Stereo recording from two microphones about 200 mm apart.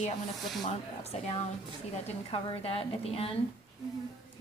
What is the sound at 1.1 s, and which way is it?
A woman's voice, 30° left (ahead or behind).